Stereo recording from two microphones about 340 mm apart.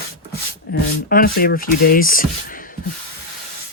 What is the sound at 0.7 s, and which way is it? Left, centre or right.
Speech, left.